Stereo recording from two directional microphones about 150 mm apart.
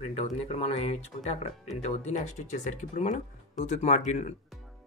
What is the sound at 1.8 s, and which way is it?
Speech, 50° left (ahead or behind).